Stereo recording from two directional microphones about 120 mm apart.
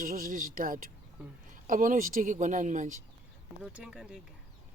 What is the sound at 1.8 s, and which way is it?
Speech, 90° right.